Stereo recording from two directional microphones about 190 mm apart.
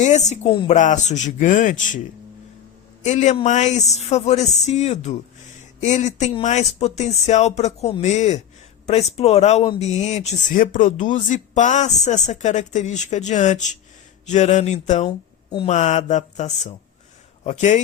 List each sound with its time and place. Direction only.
0.0 s speech: 40° left (ahead or behind)
3.0 s speech: 40° left (ahead or behind)
15.4 s mantra: 25° left (ahead or behind)
15.7 s speech: 35° left (ahead or behind)